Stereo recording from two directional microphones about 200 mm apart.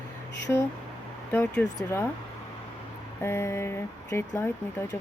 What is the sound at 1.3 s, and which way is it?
Speech, 10° left (ahead or behind).